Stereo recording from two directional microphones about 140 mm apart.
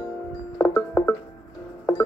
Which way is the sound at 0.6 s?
20° left (ahead or behind).